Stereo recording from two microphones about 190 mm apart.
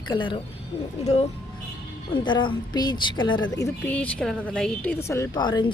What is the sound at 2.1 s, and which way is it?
A woman's voice, 25° left (ahead or behind).